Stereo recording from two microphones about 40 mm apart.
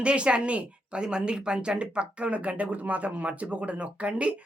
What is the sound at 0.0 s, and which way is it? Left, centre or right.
Speech, right.